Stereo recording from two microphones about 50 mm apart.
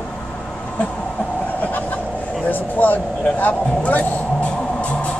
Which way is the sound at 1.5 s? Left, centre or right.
Left.